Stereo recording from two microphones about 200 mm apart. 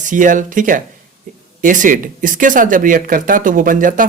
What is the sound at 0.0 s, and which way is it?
Speech, 40° right (ahead or behind).